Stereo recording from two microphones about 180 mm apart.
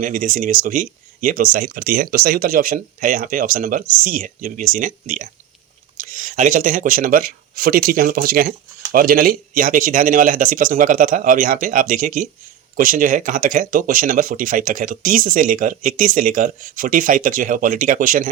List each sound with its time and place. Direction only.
0.0 s speech: 50° right (ahead or behind)